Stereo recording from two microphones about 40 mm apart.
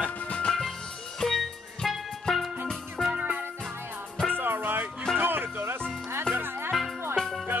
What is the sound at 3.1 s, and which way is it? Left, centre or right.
Music, right.